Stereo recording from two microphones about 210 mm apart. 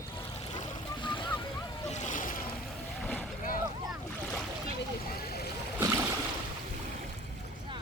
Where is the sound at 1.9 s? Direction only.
35° left (ahead or behind).